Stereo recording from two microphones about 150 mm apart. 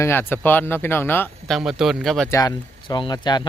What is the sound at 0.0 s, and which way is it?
Speech, 15° left (ahead or behind).